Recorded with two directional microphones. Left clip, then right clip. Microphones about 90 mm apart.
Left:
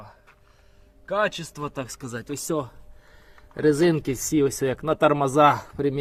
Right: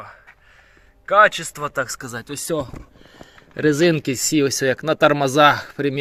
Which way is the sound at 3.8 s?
25° right (ahead or behind).